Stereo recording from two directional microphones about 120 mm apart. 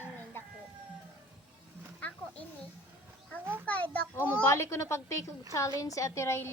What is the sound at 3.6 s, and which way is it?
A woman's voice, 15° left (ahead or behind).